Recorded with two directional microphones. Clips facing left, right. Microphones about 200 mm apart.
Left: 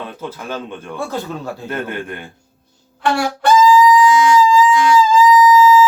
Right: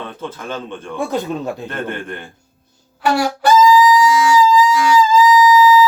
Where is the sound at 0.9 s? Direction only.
20° right (ahead or behind).